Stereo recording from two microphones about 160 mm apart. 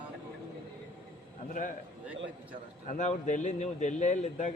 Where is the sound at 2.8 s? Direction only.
50° left (ahead or behind).